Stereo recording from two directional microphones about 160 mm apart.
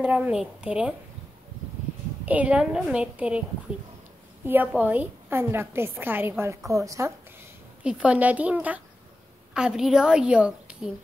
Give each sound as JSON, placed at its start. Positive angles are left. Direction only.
{"t": 0.0, "sound": "a woman's voice", "side_deg": -10}
{"t": 2.2, "sound": "a woman's voice", "side_deg": -10}
{"t": 4.5, "sound": "a woman's voice", "side_deg": -10}
{"t": 7.8, "sound": "a woman's voice", "side_deg": -5}